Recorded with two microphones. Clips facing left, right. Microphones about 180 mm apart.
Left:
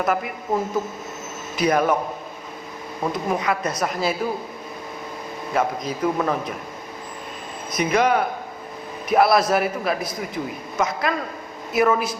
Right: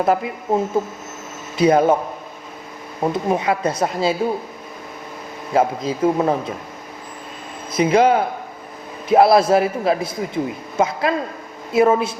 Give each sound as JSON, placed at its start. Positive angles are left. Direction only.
{"t": 0.0, "sound": "a man's voice", "side_deg": -30}
{"t": 3.0, "sound": "a man's voice", "side_deg": -25}
{"t": 5.5, "sound": "a man's voice", "side_deg": -25}
{"t": 7.7, "sound": "a man's voice", "side_deg": -25}